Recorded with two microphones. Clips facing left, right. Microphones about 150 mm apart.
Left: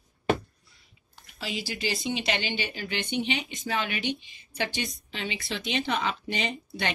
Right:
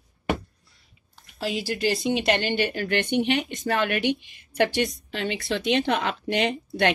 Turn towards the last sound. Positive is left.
turn(degrees=-60)  # may be behind; listen again after turning